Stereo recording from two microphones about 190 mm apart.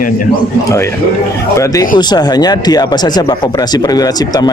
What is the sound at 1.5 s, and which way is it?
Speech, 15° left (ahead or behind).